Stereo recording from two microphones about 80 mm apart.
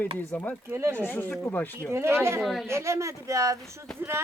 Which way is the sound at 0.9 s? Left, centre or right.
Left.